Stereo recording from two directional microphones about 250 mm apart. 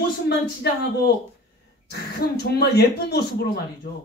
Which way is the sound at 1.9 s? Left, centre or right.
Left.